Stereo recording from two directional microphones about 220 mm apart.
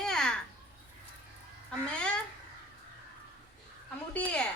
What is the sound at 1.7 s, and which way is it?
Speech, 5° left (ahead or behind).